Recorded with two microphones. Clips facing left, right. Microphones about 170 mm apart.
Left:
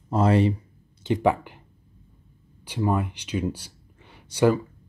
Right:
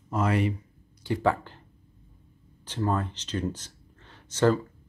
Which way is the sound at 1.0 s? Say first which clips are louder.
Left 4 dB; 20° left (ahead or behind).